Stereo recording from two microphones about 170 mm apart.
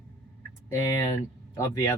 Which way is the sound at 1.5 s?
20° left (ahead or behind).